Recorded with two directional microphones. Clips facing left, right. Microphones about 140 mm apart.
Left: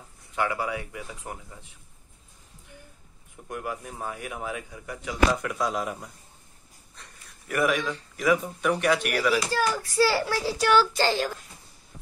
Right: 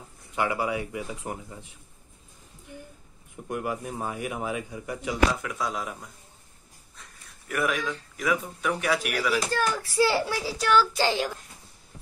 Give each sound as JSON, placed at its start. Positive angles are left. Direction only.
{"t": 0.4, "sound": "speech", "side_deg": -10}
{"t": 3.4, "sound": "speech", "side_deg": -10}
{"t": 5.3, "sound": "speech", "side_deg": 0}
{"t": 9.9, "sound": "a child's voice", "side_deg": -20}
{"t": 10.4, "sound": "speech", "side_deg": 0}
{"t": 11.0, "sound": "speech", "side_deg": -15}